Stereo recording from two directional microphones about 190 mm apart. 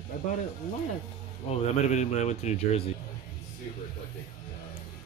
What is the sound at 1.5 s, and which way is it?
Speech, 35° left (ahead or behind).